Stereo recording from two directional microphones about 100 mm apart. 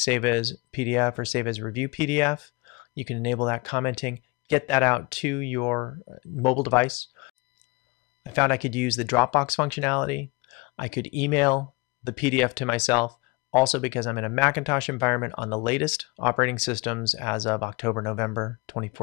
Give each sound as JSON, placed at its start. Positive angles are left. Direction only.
{"t": 0.0, "sound": "speech", "side_deg": 15}
{"t": 8.4, "sound": "speech", "side_deg": 15}